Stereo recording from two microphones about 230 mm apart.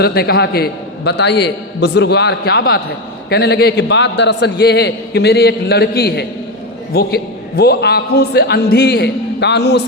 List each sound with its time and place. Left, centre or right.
0.0 s a man's voice: left